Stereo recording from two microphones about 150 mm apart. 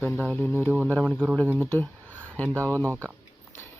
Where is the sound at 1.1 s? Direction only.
10° right (ahead or behind).